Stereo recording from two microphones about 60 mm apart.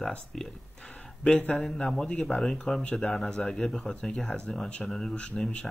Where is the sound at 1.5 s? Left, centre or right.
Centre.